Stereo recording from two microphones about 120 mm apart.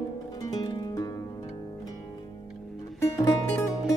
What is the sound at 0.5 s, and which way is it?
Music, 35° left (ahead or behind).